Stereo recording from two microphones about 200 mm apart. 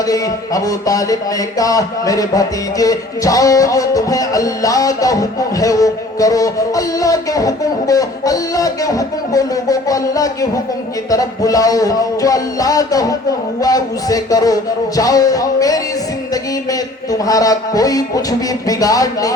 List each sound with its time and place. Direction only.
0.0 s speech: 15° left (ahead or behind)